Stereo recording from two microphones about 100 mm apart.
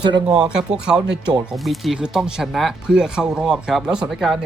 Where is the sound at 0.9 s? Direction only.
45° right (ahead or behind).